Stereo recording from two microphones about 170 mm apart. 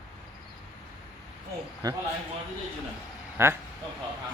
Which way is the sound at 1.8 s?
20° right (ahead or behind).